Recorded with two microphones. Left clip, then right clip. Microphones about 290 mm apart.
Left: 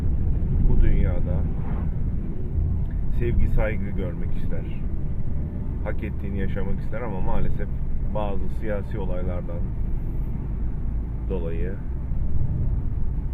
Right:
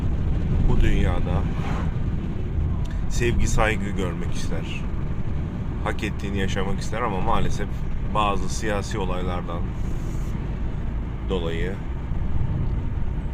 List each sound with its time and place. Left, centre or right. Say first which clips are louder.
0.8 s vehicle: right 6 dB; centre
3.2 s speech: right 6 dB; centre
5.8 s speech: right 6 dB; centre
11.3 s speech: right 4 dB; centre